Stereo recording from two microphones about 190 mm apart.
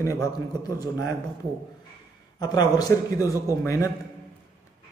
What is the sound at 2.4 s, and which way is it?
A man's voice, 20° left (ahead or behind).